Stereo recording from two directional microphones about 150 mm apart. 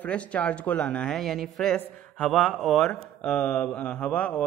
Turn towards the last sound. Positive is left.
turn(degrees=10)  # may be behind; listen again after turning